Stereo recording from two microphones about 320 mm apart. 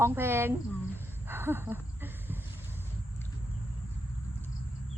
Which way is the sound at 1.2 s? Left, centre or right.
Centre.